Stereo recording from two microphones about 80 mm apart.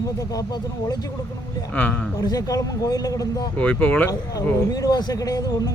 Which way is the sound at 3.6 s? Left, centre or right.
Centre.